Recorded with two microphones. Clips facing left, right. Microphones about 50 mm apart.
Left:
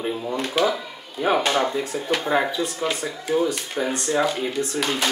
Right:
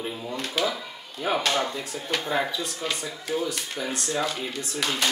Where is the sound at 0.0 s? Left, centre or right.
Centre.